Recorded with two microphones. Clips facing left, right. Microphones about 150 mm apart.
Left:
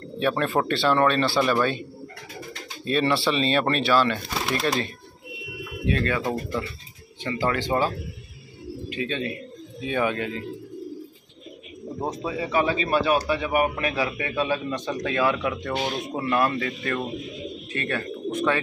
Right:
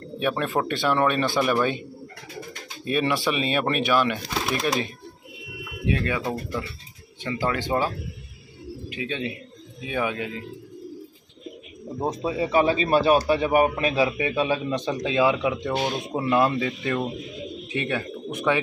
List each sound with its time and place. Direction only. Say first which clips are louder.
0.2 s a man's voice: left 1 dB; 10° right (ahead or behind)
5.9 s a man's voice: left 1 dB; 10° right (ahead or behind)
7.2 s a man's voice: left 1 dB; 10° right (ahead or behind)
12.0 s a man's voice: right 3 dB; 15° right (ahead or behind)
12.3 s a man's voice: right 3 dB; 25° right (ahead or behind)